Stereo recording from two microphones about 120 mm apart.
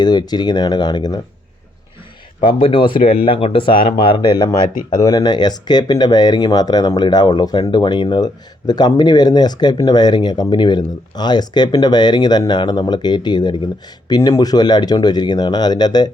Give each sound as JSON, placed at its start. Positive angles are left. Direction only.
{"t": 0.0, "sound": "speech", "side_deg": 35}
{"t": 2.4, "sound": "speech", "side_deg": 50}